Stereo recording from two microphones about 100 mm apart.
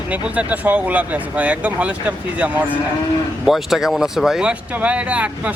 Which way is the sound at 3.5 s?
5° right (ahead or behind).